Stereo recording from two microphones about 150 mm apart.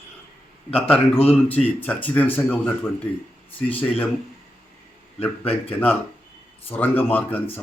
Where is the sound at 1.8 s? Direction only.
10° left (ahead or behind).